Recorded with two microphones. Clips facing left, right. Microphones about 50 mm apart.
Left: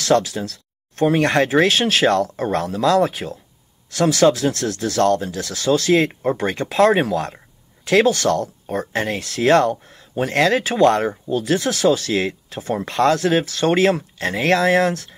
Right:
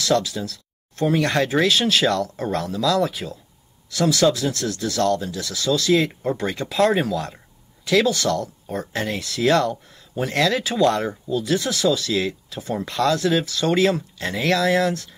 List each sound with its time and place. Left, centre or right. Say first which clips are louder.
0.0 s speech: left 3 dB; left